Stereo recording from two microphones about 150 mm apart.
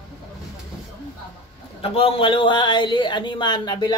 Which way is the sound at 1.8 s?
40° left (ahead or behind).